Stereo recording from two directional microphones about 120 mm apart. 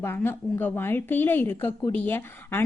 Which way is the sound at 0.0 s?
15° left (ahead or behind).